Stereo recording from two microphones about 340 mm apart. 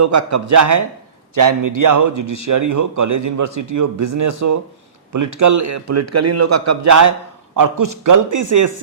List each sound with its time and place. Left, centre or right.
0.0 s speech: right
1.4 s a man's voice: right
7.5 s speech: right